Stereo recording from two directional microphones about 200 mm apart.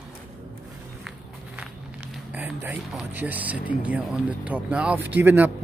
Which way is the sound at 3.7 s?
10° right (ahead or behind).